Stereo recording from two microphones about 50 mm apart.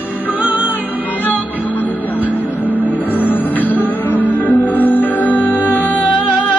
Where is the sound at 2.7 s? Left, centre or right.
Left.